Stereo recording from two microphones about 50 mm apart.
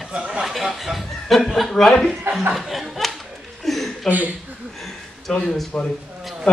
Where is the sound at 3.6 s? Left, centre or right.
Centre.